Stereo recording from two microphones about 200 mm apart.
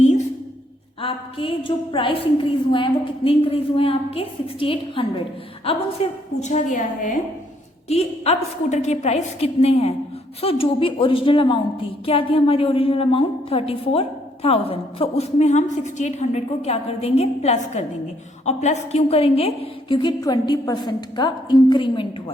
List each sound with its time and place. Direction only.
1.0 s a woman's voice: 25° left (ahead or behind)